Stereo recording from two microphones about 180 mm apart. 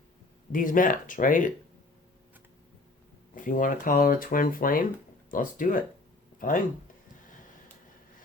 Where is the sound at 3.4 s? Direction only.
50° left (ahead or behind).